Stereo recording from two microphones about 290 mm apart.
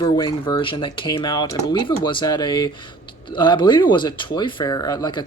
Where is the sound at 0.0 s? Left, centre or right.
Centre.